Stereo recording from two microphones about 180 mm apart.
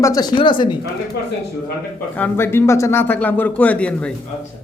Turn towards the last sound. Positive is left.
turn(degrees=10)  # may be behind; listen again after turning